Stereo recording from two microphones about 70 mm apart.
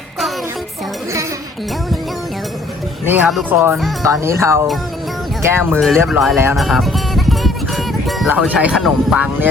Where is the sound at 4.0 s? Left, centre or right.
Right.